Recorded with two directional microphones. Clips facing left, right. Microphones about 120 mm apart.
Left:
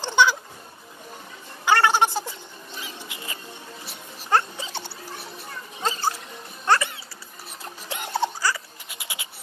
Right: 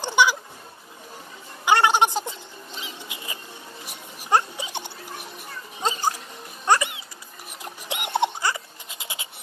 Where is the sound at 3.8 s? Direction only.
15° right (ahead or behind).